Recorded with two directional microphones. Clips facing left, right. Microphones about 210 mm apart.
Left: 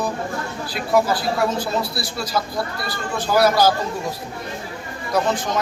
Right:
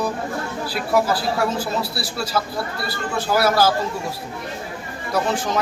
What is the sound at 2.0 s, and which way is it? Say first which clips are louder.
A man's voice: even; 5° right (ahead or behind).